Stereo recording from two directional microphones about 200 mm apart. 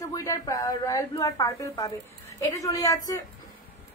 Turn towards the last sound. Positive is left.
turn(degrees=15)  # may be behind; listen again after turning